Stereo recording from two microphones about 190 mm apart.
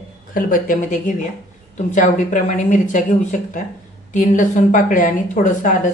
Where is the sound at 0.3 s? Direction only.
45° left (ahead or behind).